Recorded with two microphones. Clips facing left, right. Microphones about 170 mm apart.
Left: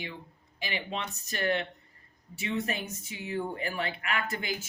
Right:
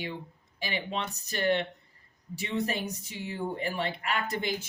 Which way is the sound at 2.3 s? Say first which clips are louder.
Right 1 dB; 35° right (ahead or behind).